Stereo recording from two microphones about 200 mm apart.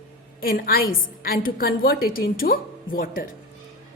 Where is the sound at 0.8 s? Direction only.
80° left.